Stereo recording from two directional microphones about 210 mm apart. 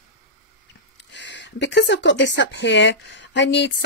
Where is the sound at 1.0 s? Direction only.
55° left (ahead or behind).